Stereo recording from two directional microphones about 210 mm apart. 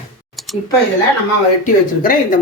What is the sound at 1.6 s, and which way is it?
Speech, 40° left (ahead or behind).